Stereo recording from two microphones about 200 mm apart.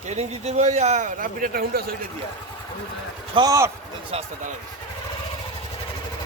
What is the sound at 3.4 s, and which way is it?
Speech, 15° right (ahead or behind).